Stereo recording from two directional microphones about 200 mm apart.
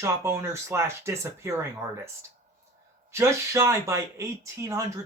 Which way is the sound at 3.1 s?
15° right (ahead or behind).